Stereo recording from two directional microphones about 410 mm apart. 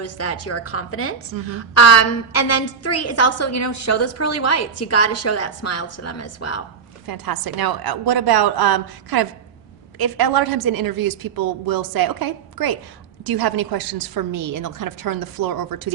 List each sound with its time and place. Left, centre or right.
0.0 s a woman's voice: left
1.3 s a woman's voice: right
1.7 s a woman's voice: left
7.1 s a woman's voice: right